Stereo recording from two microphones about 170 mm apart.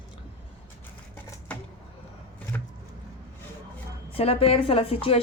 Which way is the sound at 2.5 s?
10° left (ahead or behind).